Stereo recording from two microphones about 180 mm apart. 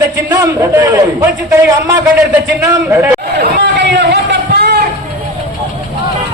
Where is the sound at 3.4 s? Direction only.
75° right (ahead or behind).